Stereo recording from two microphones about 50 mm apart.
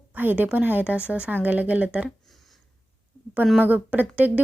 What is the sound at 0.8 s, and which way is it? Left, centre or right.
Speech, right.